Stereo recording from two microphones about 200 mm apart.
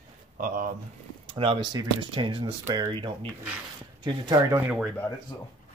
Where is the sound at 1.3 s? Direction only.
25° right (ahead or behind).